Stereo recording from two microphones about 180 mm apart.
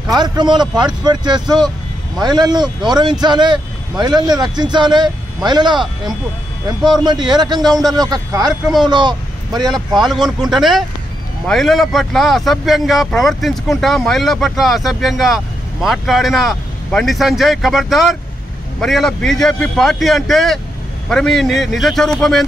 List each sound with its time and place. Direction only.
0.1 s speech: 25° right (ahead or behind)
7.6 s speech: centre (ahead or behind)
7.9 s speech: 20° right (ahead or behind)
9.7 s speech: centre (ahead or behind)